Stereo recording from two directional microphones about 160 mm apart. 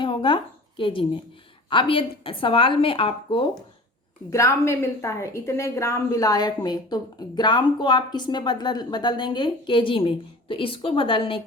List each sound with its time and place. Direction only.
0.0 s a sound: 30° left (ahead or behind)
0.8 s a woman's voice: 35° left (ahead or behind)
4.3 s a woman's voice: 20° left (ahead or behind)